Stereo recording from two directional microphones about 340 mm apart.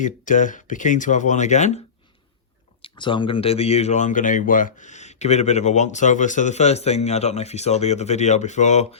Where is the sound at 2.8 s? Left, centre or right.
Centre.